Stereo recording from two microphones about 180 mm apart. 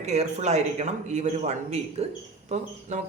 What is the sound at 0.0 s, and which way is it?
Speech, 40° right (ahead or behind).